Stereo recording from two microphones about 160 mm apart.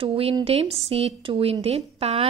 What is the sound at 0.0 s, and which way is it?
A woman's voice, 35° right (ahead or behind).